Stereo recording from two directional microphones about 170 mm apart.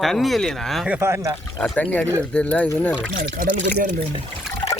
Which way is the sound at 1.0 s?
15° right (ahead or behind).